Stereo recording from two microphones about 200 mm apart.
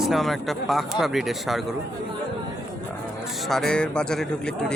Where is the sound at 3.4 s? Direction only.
Centre (ahead or behind).